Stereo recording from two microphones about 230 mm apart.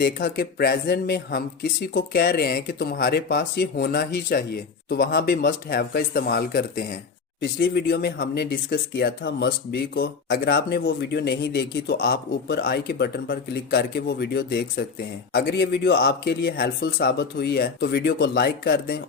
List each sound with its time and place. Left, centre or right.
0.0 s speech: left